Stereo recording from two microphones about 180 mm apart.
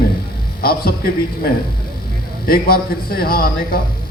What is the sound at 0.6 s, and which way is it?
Speech, 55° left (ahead or behind).